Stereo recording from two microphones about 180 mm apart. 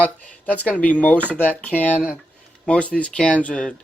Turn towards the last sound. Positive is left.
turn(degrees=5)  # may be behind; listen again after turning